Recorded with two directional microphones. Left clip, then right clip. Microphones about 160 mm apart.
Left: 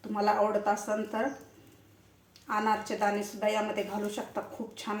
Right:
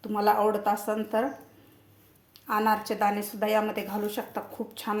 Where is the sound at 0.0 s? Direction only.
65° right (ahead or behind).